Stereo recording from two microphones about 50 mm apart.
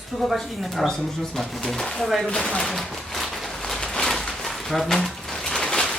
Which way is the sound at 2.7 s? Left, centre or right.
Centre.